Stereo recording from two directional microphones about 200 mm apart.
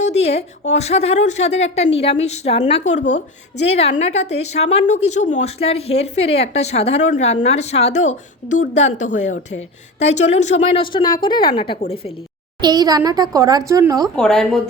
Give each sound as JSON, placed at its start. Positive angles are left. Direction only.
{"t": 0.0, "sound": "a woman's voice", "side_deg": 30}
{"t": 12.6, "sound": "speech", "side_deg": -20}
{"t": 14.2, "sound": "speech", "side_deg": 5}